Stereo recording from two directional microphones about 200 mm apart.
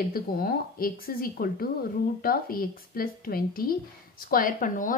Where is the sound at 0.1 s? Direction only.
45° left (ahead or behind).